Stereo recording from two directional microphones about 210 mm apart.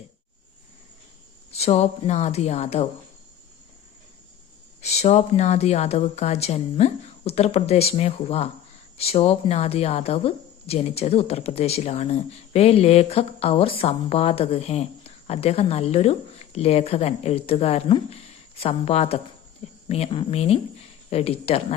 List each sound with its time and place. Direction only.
1.5 s a woman's voice: 30° left (ahead or behind)
4.8 s a woman's voice: 30° left (ahead or behind)